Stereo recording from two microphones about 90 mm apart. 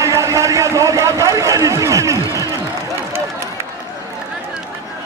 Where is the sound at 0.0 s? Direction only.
35° right (ahead or behind).